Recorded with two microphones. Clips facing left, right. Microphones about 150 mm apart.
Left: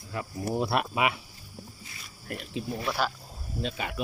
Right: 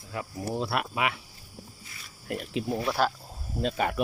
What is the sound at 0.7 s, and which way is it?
Speech, 20° left (ahead or behind).